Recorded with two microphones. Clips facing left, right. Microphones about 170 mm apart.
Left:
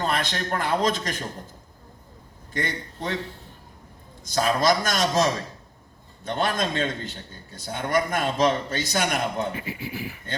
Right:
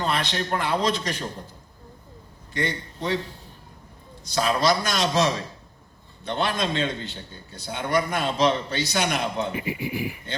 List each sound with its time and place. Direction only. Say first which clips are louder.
0.0 s a man's voice: even; 45° left (ahead or behind)
2.5 s a man's voice: right 2 dB; 45° left (ahead or behind)
4.2 s a man's voice: even; 45° left (ahead or behind)
9.5 s speech: right 4 dB; 15° right (ahead or behind)